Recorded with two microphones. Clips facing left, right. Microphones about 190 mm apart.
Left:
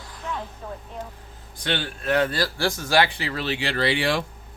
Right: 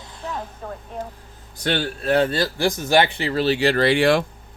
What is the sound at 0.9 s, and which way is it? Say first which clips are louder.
Speech: right 4 dB; 45° right (ahead or behind).